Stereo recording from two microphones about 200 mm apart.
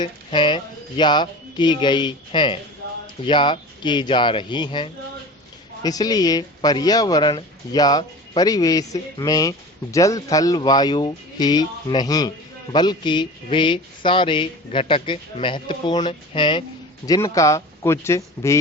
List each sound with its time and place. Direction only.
0.0 s speech: 25° left (ahead or behind)